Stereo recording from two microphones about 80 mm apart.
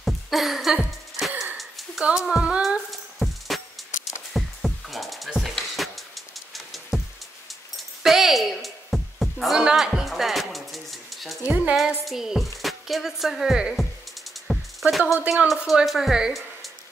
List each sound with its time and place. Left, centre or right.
0.0 s music: centre
1.6 s a sound: centre
2.0 s speech: centre
2.9 s music: centre
11.4 s speech: centre
12.0 s music: centre
12.6 s speech: centre
14.5 s music: centre
15.4 s a woman's voice: centre